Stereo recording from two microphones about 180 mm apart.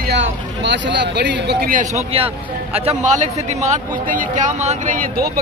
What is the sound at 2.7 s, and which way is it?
A man's voice, 40° right (ahead or behind).